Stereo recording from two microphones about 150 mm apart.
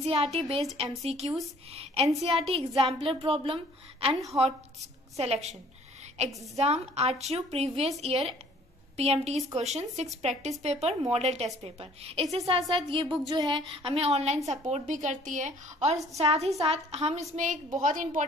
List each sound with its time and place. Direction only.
0.0 s a woman's voice: 45° right (ahead or behind)
17.7 s a woman's voice: 60° right (ahead or behind)